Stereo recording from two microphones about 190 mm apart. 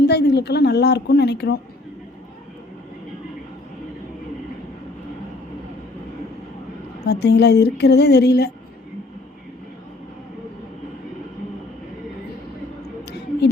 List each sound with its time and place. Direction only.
0.0 s a woman's voice: 60° left (ahead or behind)
7.0 s a woman's voice: 60° left (ahead or behind)